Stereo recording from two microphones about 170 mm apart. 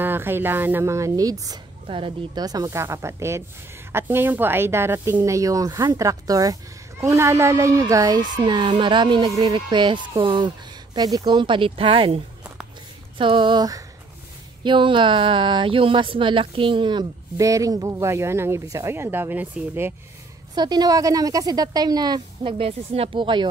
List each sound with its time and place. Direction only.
0.0 s speech: 10° right (ahead or behind)
1.9 s speech: 30° right (ahead or behind)
13.2 s speech: 30° right (ahead or behind); by 19.9 s 10° right (ahead or behind)
20.5 s speech: 25° right (ahead or behind)